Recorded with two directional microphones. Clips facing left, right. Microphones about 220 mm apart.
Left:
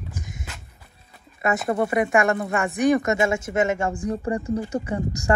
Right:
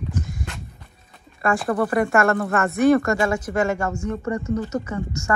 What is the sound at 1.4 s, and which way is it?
Speech, 20° left (ahead or behind).